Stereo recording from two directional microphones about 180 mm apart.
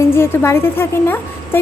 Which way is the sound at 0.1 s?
15° left (ahead or behind).